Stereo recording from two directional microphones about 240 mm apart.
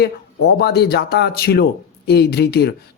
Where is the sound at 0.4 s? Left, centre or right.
Left.